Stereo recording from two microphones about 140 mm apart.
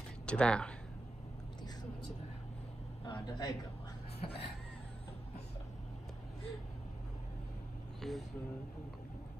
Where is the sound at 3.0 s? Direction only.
30° left (ahead or behind).